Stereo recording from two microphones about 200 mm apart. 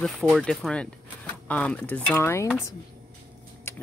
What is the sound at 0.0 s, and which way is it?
Speech, centre (ahead or behind).